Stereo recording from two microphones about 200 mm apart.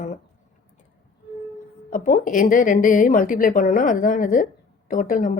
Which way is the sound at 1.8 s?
45° left (ahead or behind).